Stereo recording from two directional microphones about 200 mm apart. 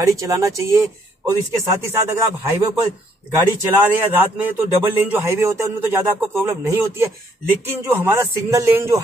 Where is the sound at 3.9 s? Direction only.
10° right (ahead or behind).